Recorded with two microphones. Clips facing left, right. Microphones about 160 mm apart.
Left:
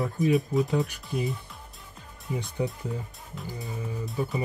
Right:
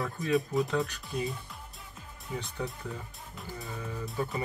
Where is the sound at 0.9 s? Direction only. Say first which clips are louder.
Left 4 dB; 15° left (ahead or behind).